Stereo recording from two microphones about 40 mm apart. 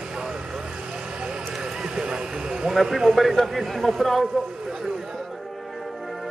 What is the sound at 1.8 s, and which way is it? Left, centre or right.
Vehicle, centre.